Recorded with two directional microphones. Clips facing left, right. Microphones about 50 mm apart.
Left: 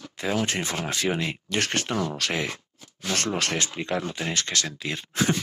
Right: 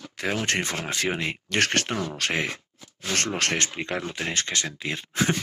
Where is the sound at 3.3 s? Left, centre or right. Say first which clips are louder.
Right 1 dB; right.